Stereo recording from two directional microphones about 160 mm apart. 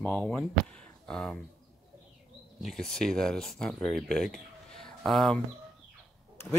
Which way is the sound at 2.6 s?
5° left (ahead or behind).